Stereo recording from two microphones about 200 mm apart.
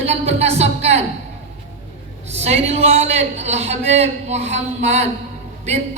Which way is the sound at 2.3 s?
30° right (ahead or behind).